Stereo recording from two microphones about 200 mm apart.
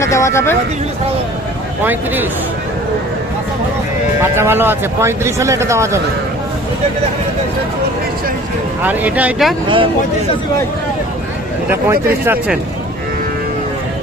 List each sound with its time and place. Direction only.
0.0 s speech: 15° left (ahead or behind)
1.8 s speech: 10° right (ahead or behind)
4.2 s speech: 10° right (ahead or behind)
8.8 s speech: 10° right (ahead or behind)
9.6 s speech: 25° right (ahead or behind)
11.7 s speech: 10° right (ahead or behind)